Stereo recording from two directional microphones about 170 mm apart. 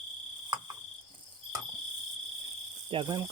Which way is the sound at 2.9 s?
30° right (ahead or behind).